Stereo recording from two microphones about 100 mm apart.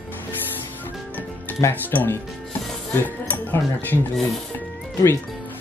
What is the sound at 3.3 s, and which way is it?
Speech, 20° left (ahead or behind).